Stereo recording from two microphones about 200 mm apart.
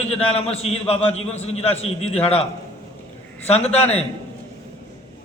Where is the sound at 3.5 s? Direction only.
30° left (ahead or behind).